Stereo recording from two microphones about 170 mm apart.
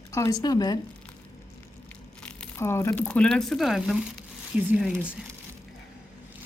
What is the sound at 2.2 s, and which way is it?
Speech, 10° left (ahead or behind).